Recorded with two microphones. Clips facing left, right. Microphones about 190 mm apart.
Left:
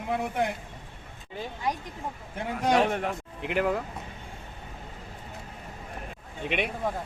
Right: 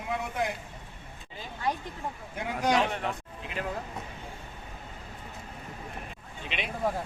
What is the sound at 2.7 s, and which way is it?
Speech, 45° left (ahead or behind).